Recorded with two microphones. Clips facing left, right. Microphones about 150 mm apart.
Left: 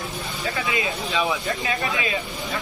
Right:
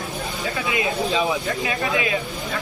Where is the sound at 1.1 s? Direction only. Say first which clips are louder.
Even; 20° right (ahead or behind).